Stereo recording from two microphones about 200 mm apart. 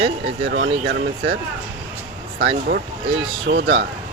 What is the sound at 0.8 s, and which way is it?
Speech, 50° right (ahead or behind).